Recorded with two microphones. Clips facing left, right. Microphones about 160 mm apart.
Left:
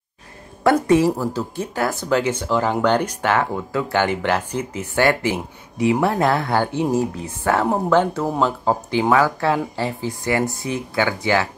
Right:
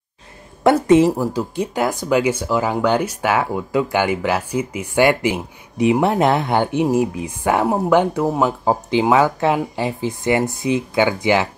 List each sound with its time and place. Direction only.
0.8 s speech: 20° right (ahead or behind)